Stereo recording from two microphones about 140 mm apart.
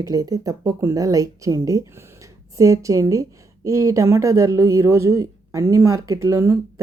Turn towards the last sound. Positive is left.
turn(degrees=-20)  # may be behind; listen again after turning